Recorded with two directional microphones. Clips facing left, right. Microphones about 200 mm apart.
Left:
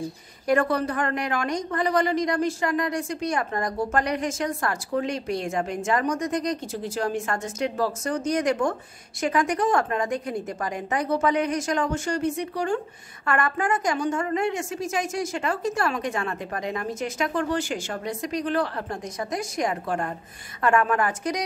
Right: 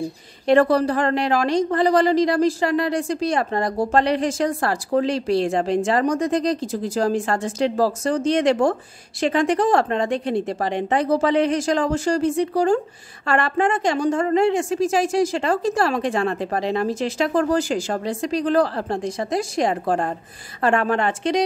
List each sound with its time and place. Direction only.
0.5 s a woman's voice: 35° right (ahead or behind)